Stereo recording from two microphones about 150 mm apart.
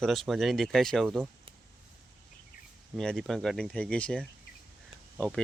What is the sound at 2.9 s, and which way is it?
Speech, 5° left (ahead or behind).